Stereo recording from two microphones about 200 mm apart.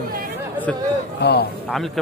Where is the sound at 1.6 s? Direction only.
Centre (ahead or behind).